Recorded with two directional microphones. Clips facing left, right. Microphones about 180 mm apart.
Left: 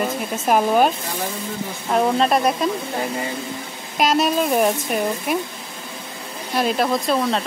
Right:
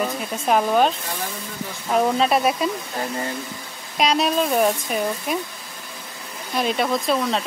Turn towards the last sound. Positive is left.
turn(degrees=0)  # may be behind; listen again after turning